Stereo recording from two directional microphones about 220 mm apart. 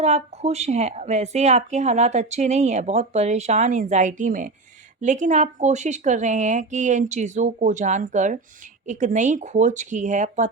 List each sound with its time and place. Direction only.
0.0 s a woman's voice: 30° right (ahead or behind)